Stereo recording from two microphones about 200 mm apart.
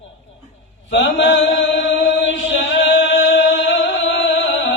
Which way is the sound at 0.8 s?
65° left (ahead or behind).